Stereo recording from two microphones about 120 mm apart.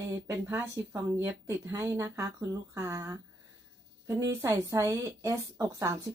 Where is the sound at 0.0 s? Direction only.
25° right (ahead or behind).